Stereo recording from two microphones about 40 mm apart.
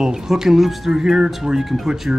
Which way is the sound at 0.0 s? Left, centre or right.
Centre.